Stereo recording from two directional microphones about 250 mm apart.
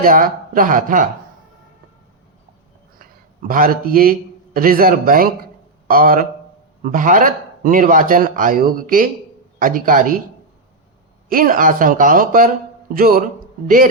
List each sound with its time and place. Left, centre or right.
0.0 s a man's voice: right
3.4 s a man's voice: right
11.3 s a man's voice: right